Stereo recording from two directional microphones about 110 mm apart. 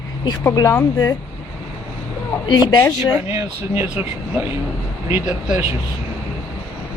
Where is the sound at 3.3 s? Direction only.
25° right (ahead or behind).